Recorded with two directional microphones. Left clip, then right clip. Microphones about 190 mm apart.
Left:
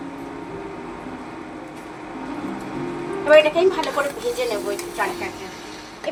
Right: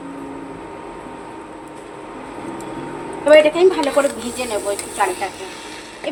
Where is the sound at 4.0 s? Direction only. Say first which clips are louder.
Right 6 dB; 50° right (ahead or behind).